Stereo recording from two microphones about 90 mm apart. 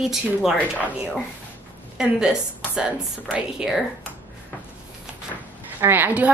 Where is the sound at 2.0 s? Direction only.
10° right (ahead or behind).